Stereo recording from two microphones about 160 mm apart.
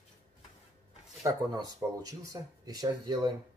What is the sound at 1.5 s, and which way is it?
Speech, 25° right (ahead or behind).